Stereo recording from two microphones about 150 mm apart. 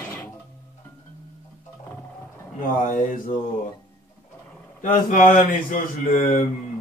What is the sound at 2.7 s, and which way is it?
Speech, 65° left (ahead or behind).